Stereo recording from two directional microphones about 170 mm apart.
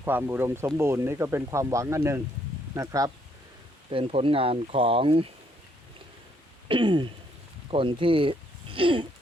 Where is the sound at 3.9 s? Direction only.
35° right (ahead or behind).